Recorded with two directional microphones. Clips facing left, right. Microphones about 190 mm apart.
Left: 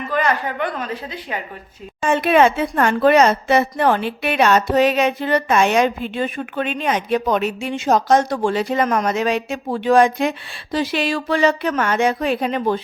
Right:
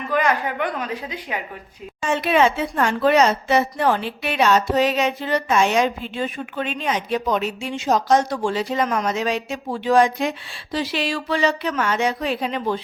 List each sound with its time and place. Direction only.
0.1 s a woman's voice: 10° right (ahead or behind)
2.0 s speech: 50° left (ahead or behind)